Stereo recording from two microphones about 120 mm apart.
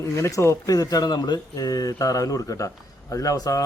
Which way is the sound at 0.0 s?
25° left (ahead or behind).